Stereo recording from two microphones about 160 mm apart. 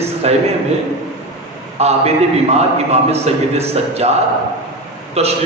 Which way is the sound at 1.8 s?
40° right (ahead or behind).